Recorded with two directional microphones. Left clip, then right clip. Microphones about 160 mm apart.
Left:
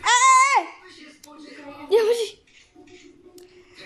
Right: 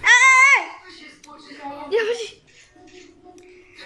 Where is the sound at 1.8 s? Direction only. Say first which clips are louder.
Left 3 dB; 25° left (ahead or behind).